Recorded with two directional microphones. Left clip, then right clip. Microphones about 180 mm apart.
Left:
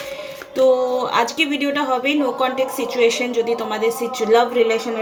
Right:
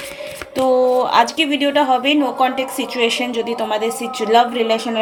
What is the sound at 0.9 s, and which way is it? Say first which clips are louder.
Speech: right 4 dB; 40° right (ahead or behind).